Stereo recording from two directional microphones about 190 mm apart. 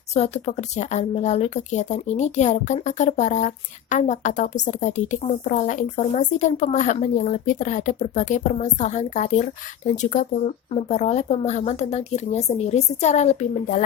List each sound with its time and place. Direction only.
0.1 s a woman's voice: 35° left (ahead or behind)